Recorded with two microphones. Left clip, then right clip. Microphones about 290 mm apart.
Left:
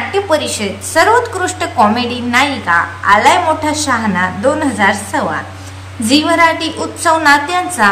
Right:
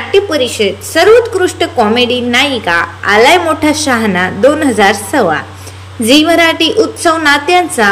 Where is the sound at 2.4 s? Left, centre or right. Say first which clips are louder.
Right 1 dB; centre.